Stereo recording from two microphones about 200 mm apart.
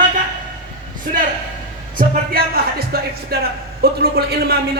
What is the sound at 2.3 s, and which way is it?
Speech, 50° right (ahead or behind).